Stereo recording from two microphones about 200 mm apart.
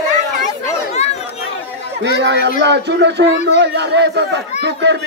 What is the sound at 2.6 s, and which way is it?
A man's voice, 60° right (ahead or behind).